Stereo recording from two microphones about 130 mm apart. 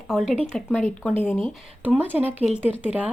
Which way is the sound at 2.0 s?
15° right (ahead or behind).